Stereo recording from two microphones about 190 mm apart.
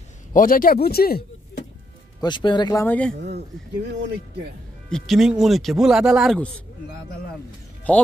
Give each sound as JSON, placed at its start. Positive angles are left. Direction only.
{"t": 0.3, "sound": "speech", "side_deg": 45}
{"t": 2.2, "sound": "speech", "side_deg": 25}
{"t": 4.8, "sound": "speech", "side_deg": 0}
{"t": 7.9, "sound": "speech", "side_deg": 5}